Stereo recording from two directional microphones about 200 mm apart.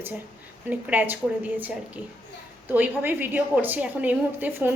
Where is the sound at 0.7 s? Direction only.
10° right (ahead or behind).